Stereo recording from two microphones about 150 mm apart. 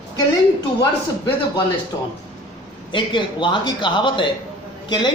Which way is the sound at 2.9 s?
30° left (ahead or behind).